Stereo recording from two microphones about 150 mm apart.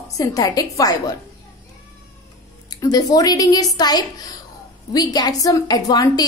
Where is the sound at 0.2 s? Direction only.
25° left (ahead or behind).